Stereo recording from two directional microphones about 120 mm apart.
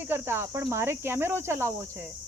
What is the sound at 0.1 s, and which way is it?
Speech, 20° right (ahead or behind).